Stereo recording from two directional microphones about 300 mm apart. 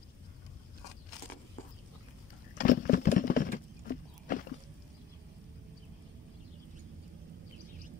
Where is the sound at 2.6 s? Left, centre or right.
Left.